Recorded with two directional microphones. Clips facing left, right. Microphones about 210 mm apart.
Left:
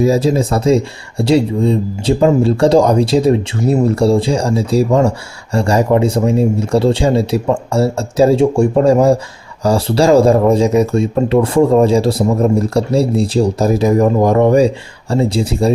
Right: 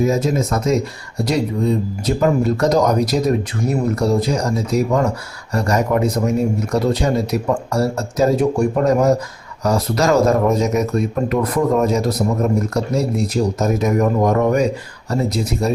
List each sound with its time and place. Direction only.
0.0 s speech: 35° left (ahead or behind)